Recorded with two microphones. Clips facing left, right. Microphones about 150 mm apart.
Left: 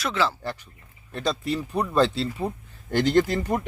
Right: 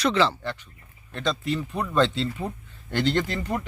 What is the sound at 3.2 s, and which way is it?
Speech, 10° left (ahead or behind).